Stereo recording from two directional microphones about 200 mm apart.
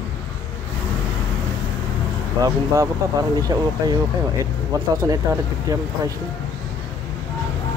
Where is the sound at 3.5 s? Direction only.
15° right (ahead or behind).